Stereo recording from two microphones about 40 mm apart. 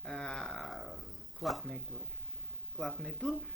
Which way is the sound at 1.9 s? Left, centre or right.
Left.